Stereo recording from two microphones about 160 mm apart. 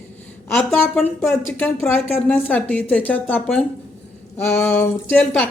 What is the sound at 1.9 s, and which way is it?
A woman's voice, 10° left (ahead or behind).